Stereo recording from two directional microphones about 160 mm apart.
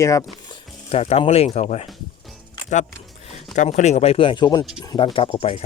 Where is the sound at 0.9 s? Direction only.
40° left (ahead or behind).